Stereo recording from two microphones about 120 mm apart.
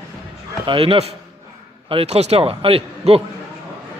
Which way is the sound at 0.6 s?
50° right (ahead or behind).